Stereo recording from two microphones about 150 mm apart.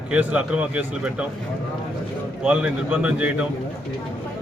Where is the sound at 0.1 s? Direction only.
10° right (ahead or behind).